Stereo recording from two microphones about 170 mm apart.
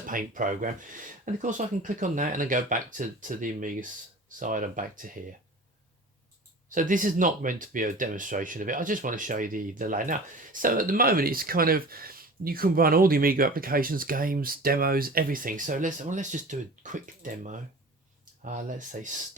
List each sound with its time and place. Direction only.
0.0 s speech: 50° right (ahead or behind)
6.7 s speech: 50° right (ahead or behind)
18.4 s speech: 50° right (ahead or behind)